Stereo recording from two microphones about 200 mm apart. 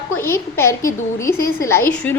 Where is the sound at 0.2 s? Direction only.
10° left (ahead or behind).